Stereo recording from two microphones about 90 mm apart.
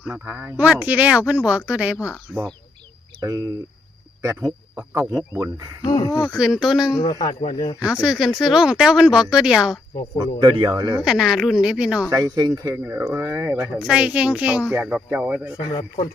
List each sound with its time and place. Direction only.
0.1 s speech: 25° right (ahead or behind)
2.3 s speech: centre (ahead or behind)
3.2 s speech: 40° right (ahead or behind)
4.7 s speech: 25° right (ahead or behind)
5.9 s a man's voice: 40° left (ahead or behind)
6.2 s speech: 5° right (ahead or behind)
6.9 s a man's voice: 45° left (ahead or behind)
7.8 s speech: 10° right (ahead or behind)
10.4 s speech: 55° right (ahead or behind)
11.0 s speech: 5° right (ahead or behind)
12.1 s speech: 45° right (ahead or behind)
12.8 s speech: 25° right (ahead or behind)
13.7 s speech: 10° right (ahead or behind)
15.7 s speech: 70° left (ahead or behind)